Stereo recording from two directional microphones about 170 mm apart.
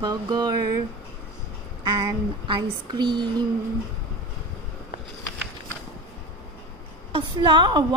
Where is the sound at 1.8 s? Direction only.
25° right (ahead or behind).